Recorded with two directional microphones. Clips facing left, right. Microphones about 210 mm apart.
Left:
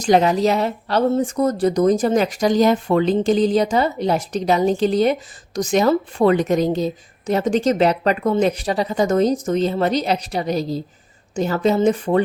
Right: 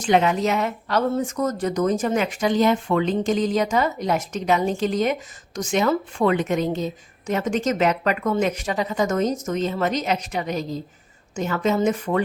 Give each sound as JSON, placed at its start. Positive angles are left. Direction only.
{"t": 0.0, "sound": "a woman's voice", "side_deg": 35}